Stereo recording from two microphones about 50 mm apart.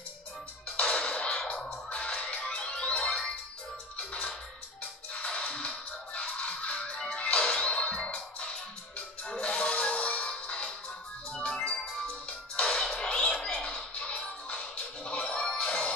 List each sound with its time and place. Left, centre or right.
0.7 s music: left
12.5 s music: left